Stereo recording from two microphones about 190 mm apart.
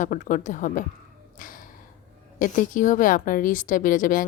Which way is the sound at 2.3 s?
45° left (ahead or behind).